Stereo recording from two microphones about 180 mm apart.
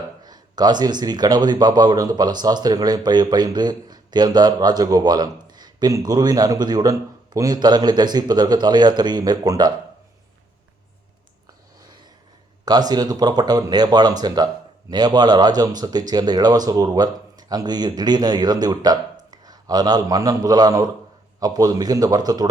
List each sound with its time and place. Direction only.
0.2 s speech: 20° right (ahead or behind)
12.6 s speech: 20° right (ahead or behind)